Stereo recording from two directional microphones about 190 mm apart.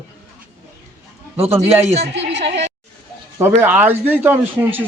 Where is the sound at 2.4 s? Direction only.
35° right (ahead or behind).